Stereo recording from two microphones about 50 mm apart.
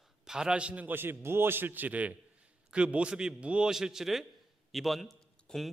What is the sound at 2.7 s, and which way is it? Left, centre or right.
A man's voice, right.